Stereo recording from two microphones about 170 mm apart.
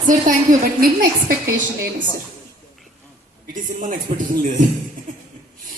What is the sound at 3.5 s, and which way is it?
Speech, 50° right (ahead or behind).